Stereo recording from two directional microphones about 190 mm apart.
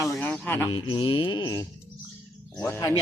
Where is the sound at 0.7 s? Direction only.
25° left (ahead or behind).